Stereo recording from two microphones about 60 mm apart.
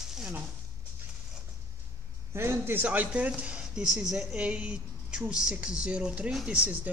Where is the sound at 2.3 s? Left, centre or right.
Right.